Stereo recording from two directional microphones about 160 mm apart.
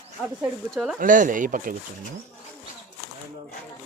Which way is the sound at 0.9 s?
55° right (ahead or behind).